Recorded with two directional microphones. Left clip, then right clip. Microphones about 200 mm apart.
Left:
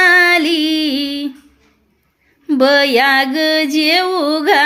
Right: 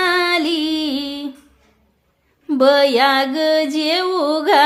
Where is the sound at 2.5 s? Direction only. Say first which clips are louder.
Left 1 dB; 5° left (ahead or behind).